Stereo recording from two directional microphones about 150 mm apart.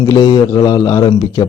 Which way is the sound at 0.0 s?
25° left (ahead or behind).